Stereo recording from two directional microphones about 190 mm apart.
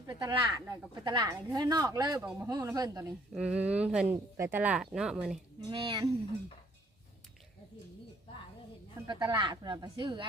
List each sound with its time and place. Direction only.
0.1 s speech: 20° right (ahead or behind)
3.3 s speech: 5° right (ahead or behind)
5.6 s speech: 25° right (ahead or behind)
9.0 s speech: 20° right (ahead or behind)